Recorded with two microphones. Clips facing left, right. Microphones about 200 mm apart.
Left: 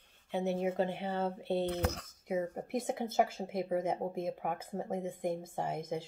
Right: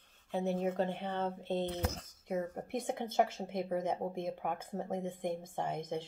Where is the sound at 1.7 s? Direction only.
65° left (ahead or behind).